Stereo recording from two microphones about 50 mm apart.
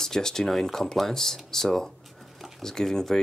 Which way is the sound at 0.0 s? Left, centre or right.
Centre.